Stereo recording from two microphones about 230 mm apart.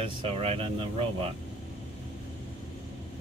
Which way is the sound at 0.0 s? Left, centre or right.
Right.